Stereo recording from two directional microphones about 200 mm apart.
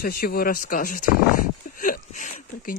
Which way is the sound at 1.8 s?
40° left (ahead or behind).